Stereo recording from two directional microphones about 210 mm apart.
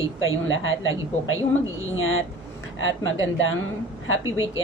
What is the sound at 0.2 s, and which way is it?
A woman's voice, 70° left (ahead or behind).